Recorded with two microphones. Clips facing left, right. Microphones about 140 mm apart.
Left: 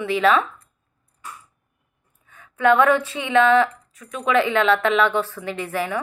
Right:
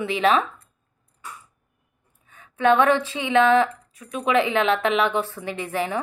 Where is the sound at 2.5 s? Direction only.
20° right (ahead or behind).